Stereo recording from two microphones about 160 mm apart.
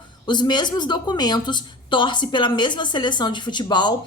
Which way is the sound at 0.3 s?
25° left (ahead or behind).